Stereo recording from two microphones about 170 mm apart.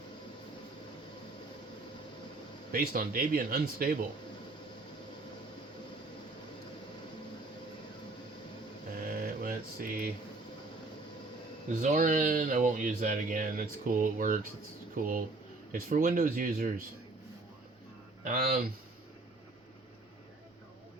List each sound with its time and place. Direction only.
2.7 s speech: 55° right (ahead or behind)
9.2 s a sound: 60° right (ahead or behind)
11.7 s speech: 50° right (ahead or behind)
18.2 s speech: 55° right (ahead or behind)